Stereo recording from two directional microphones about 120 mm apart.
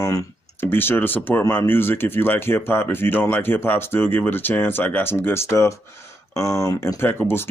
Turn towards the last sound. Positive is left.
turn(degrees=15)  # may be behind; listen again after turning